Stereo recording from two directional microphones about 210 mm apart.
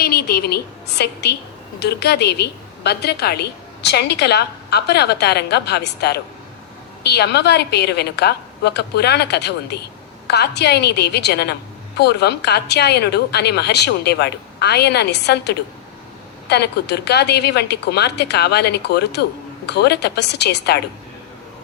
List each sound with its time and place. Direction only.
0.0 s a woman's voice: 50° left (ahead or behind)